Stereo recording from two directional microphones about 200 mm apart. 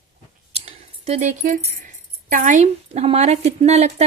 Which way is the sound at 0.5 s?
30° right (ahead or behind).